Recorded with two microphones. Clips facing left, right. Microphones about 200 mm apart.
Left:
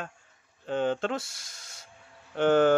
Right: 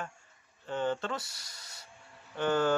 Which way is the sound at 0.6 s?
80° left.